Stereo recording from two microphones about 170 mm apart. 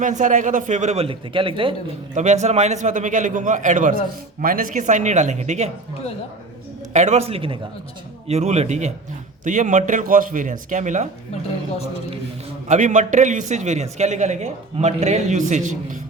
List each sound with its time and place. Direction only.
0.0 s a man's voice: 45° right (ahead or behind); by 1.7 s 30° right (ahead or behind)
2.1 s a man's voice: 45° right (ahead or behind)
6.9 s a man's voice: 45° right (ahead or behind)
12.6 s a man's voice: 45° right (ahead or behind)